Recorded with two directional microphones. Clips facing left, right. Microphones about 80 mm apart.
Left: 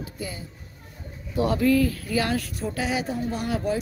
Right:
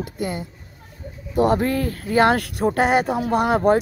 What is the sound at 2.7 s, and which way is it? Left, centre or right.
Speech, right.